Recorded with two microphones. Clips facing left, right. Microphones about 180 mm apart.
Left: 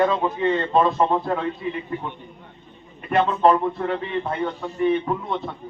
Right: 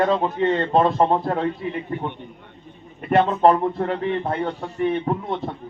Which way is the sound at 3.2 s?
50° right (ahead or behind).